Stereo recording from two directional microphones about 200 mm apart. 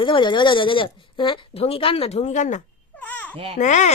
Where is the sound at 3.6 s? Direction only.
35° left (ahead or behind).